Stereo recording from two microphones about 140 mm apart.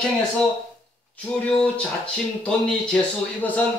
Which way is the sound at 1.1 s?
10° left (ahead or behind).